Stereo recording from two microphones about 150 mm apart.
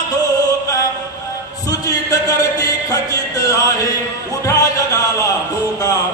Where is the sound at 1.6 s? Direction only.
25° left (ahead or behind).